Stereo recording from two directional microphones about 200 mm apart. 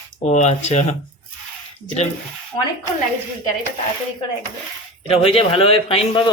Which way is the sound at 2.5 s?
25° left (ahead or behind).